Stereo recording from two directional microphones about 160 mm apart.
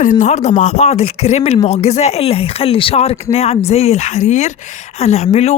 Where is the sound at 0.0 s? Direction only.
50° left (ahead or behind).